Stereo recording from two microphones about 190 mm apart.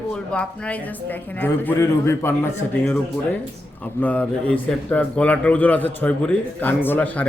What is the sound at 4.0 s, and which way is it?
A man's voice, 10° left (ahead or behind).